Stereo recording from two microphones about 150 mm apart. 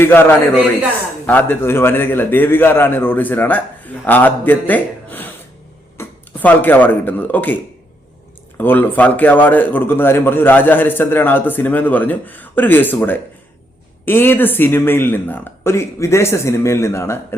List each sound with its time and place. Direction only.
0.0 s a man's voice: 15° left (ahead or behind)